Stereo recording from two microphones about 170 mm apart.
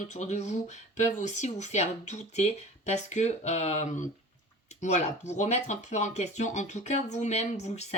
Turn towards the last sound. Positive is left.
turn(degrees=40)  # may be behind; listen again after turning